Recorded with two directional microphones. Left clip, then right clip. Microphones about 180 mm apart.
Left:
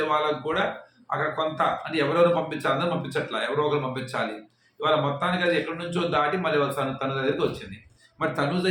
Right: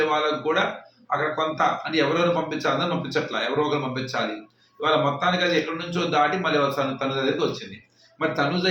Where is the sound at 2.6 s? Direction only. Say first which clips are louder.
Right 1 dB; 10° left (ahead or behind).